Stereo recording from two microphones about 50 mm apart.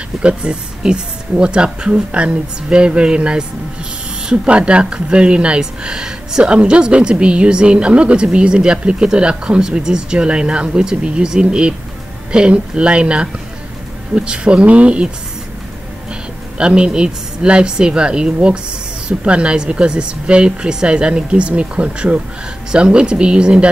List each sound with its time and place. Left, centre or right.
0.2 s speech: right
16.5 s speech: centre